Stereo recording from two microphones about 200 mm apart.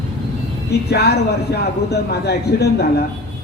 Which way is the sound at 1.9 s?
55° left (ahead or behind).